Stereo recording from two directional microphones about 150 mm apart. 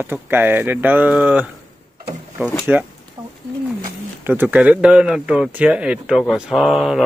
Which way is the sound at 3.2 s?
30° right (ahead or behind).